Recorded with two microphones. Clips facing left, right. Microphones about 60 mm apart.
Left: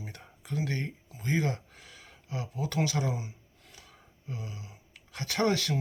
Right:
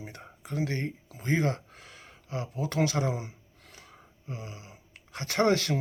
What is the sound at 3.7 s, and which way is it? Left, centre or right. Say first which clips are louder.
Gasp: right 3 dB; right.